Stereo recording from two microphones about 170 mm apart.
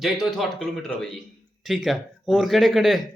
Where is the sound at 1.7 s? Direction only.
Centre (ahead or behind).